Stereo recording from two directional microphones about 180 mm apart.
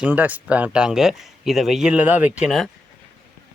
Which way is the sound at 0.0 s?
10° right (ahead or behind).